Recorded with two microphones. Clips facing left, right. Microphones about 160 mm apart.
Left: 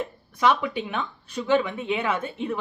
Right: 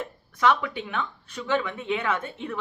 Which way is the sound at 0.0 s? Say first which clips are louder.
Left 1 dB; 15° left (ahead or behind).